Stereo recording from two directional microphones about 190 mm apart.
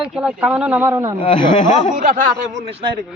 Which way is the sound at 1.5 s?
40° left (ahead or behind).